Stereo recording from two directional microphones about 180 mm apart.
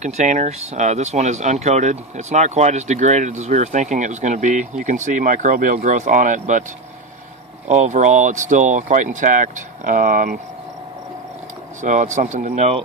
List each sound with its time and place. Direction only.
0.0 s speech: 40° right (ahead or behind)
7.6 s speech: 40° right (ahead or behind)
11.8 s speech: 45° right (ahead or behind)